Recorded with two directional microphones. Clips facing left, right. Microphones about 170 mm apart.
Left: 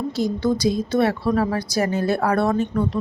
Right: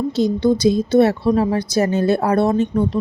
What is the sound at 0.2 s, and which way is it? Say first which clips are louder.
Speech: right 5 dB; 20° right (ahead or behind).